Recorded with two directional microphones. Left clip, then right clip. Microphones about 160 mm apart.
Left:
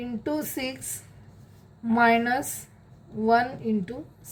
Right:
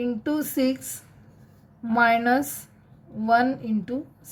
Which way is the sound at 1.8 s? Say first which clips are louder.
Right 1 dB; 25° right (ahead or behind).